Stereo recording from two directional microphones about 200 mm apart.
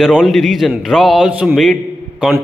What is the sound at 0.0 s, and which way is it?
Speech, centre (ahead or behind).